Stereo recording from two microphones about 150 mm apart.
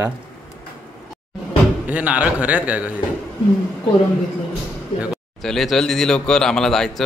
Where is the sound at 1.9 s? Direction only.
10° right (ahead or behind).